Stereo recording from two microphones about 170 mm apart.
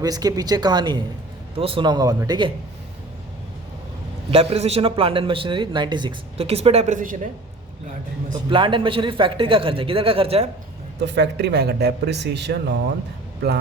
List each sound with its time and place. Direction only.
0.0 s speech: 20° right (ahead or behind)
4.3 s a man's voice: 35° right (ahead or behind)
8.4 s a man's voice: 30° right (ahead or behind)
11.0 s speech: 85° right